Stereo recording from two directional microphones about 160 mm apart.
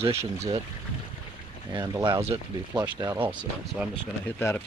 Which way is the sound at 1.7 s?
25° right (ahead or behind).